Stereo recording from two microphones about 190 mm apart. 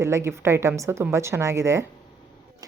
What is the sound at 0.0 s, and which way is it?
A woman's voice, 15° right (ahead or behind).